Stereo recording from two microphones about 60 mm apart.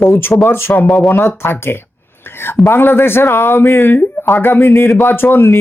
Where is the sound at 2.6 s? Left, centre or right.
Left.